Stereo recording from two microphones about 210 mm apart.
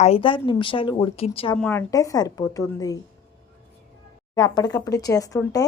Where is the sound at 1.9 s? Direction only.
15° left (ahead or behind).